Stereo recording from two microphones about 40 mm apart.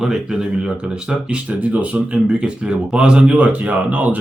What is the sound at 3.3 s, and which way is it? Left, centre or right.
Speech, right.